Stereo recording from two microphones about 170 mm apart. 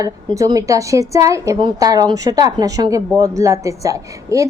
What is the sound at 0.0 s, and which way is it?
A woman's voice, 20° right (ahead or behind).